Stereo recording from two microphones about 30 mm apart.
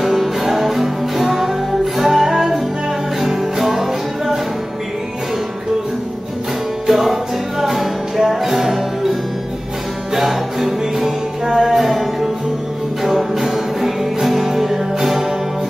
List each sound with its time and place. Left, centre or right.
0.0 s music: centre
6.9 s music: centre
10.1 s music: centre
11.9 s music: centre
13.1 s music: centre